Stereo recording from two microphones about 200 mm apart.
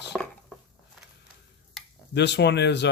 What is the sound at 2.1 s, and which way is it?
Speech, 60° left (ahead or behind).